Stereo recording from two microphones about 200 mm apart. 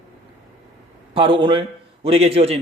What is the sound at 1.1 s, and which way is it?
A man's voice, 25° right (ahead or behind).